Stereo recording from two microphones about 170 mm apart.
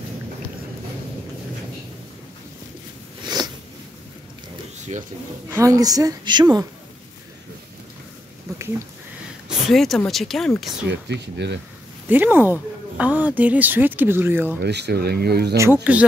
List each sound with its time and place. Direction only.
5.5 s a woman's voice: 20° right (ahead or behind)
9.5 s speech: centre (ahead or behind)
10.9 s speech: 90° right
12.1 s speech: 10° right (ahead or behind)
14.6 s speech: 75° right (ahead or behind)
15.5 s speech: 15° right (ahead or behind)